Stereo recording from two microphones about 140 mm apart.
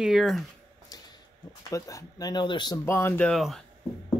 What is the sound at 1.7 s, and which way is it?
Speech, 25° left (ahead or behind).